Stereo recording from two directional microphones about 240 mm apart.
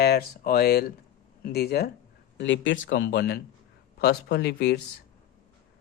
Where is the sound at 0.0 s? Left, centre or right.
Left.